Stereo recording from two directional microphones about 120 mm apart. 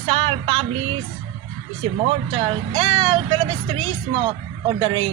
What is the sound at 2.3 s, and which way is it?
Speech, 45° right (ahead or behind).